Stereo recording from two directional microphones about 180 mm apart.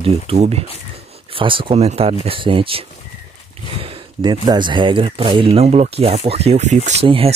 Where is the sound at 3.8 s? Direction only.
25° right (ahead or behind).